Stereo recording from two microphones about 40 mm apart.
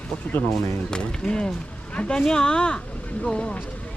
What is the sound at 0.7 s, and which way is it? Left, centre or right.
Speech, left.